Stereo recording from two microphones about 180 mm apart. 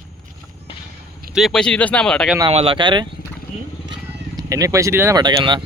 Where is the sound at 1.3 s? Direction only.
Centre (ahead or behind).